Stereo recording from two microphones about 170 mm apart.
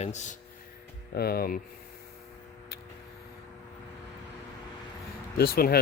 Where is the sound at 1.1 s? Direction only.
65° left (ahead or behind).